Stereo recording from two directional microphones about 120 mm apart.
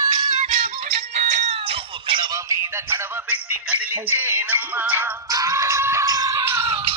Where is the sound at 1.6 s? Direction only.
50° right (ahead or behind).